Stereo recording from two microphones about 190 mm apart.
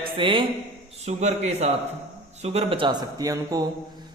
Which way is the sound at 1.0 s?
35° right (ahead or behind).